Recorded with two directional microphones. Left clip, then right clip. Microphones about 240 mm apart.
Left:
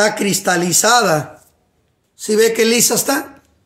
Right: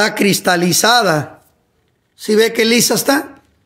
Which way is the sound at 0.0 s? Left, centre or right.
Right.